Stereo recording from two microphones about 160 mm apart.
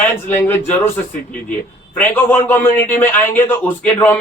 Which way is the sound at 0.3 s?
15° left (ahead or behind).